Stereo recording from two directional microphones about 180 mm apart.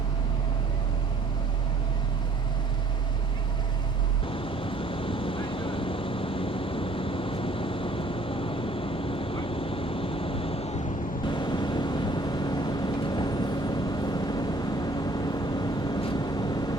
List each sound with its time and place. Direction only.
4.3 s vehicle: 30° left (ahead or behind)